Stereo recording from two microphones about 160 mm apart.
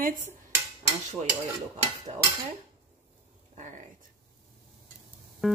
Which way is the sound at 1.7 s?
40° right (ahead or behind).